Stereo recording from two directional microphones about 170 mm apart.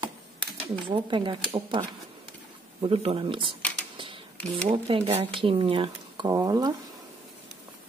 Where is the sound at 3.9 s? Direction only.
30° right (ahead or behind).